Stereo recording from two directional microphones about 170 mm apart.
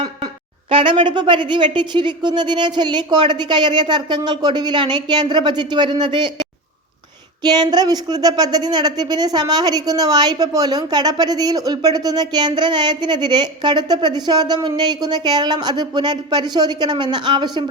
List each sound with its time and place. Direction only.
0.7 s speech: 30° right (ahead or behind)
7.4 s speech: 25° right (ahead or behind)